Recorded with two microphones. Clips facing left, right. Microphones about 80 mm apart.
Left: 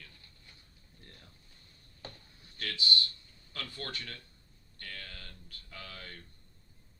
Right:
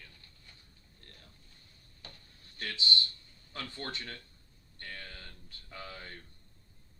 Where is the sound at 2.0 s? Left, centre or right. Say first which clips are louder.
Left 5 dB; left.